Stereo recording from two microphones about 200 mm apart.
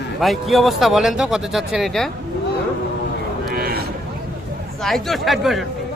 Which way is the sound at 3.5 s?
50° right (ahead or behind).